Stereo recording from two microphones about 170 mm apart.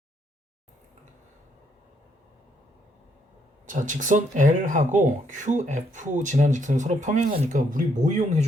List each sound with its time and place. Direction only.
3.7 s speech: 50° right (ahead or behind)